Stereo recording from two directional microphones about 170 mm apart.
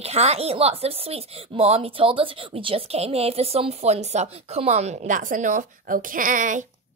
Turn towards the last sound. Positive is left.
turn(degrees=-50)  # may be behind; listen again after turning